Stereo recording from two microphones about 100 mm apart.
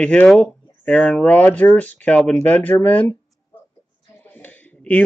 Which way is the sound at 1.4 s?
15° left (ahead or behind).